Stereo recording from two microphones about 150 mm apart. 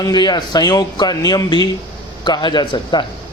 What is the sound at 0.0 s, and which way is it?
A man's voice, 30° left (ahead or behind).